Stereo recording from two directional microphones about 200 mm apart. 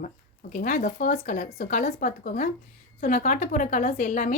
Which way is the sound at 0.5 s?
40° left (ahead or behind).